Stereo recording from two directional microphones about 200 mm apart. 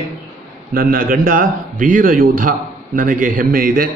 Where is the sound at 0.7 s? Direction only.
45° right (ahead or behind).